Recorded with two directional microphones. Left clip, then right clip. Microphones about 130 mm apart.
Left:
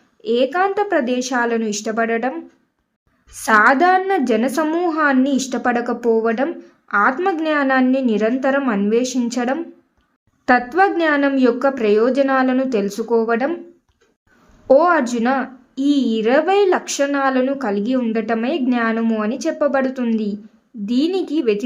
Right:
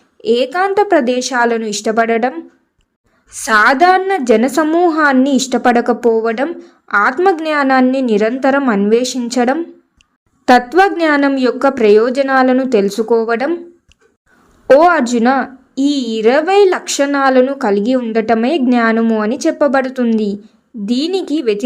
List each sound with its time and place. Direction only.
0.2 s a woman's voice: 25° right (ahead or behind)
14.7 s a woman's voice: 25° right (ahead or behind)